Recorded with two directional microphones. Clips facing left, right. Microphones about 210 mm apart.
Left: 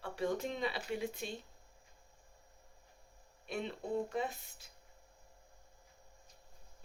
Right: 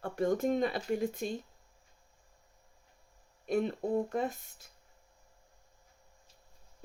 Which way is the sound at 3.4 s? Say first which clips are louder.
Right 8 dB; 45° right (ahead or behind).